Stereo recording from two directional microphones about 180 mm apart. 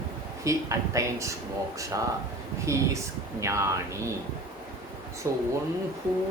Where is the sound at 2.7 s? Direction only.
15° right (ahead or behind).